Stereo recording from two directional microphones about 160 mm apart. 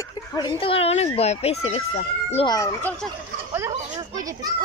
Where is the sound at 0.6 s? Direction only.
35° left (ahead or behind).